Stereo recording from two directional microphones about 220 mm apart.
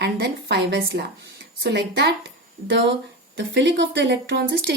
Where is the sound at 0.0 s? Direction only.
50° right (ahead or behind).